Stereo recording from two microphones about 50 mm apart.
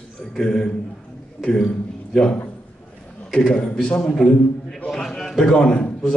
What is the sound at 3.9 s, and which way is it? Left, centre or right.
Speech, left.